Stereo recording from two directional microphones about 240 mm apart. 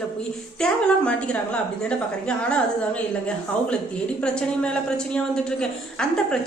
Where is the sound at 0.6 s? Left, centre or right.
Centre.